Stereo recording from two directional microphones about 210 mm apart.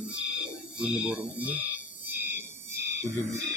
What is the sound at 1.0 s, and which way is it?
Speech, 5° right (ahead or behind).